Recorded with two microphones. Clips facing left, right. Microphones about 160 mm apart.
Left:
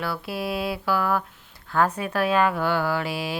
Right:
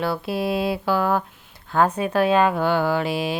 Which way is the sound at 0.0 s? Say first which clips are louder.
Right 5 dB; 25° right (ahead or behind).